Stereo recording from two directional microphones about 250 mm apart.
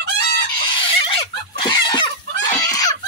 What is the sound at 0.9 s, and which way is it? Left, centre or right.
Pig, left.